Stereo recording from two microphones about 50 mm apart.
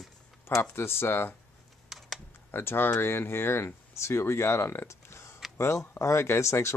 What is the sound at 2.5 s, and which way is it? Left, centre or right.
Speech, left.